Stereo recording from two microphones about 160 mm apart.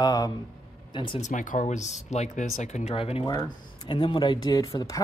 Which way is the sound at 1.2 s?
55° left (ahead or behind).